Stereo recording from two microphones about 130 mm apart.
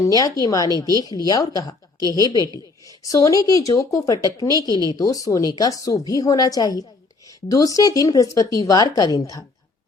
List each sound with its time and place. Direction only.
0.0 s a woman's voice: 25° left (ahead or behind)